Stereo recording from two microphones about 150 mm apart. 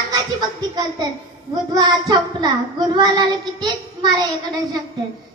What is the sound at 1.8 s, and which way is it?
Child singing, 30° right (ahead or behind).